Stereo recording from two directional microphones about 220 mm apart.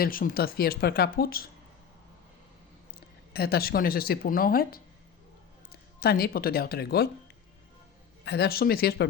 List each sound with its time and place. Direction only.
0.0 s speech: 40° left (ahead or behind)
3.3 s speech: 45° left (ahead or behind)
6.0 s speech: 45° left (ahead or behind)
8.2 s speech: 45° left (ahead or behind)